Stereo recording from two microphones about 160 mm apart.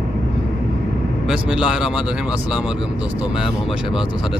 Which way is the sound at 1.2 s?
5° right (ahead or behind).